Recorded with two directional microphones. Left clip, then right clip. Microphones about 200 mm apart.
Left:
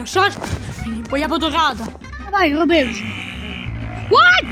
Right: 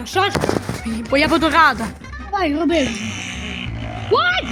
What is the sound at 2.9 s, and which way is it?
Music, 5° left (ahead or behind).